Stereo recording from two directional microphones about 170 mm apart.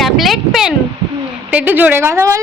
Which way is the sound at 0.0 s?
Centre (ahead or behind).